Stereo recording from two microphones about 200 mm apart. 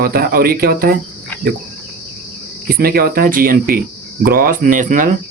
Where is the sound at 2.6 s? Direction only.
50° right (ahead or behind).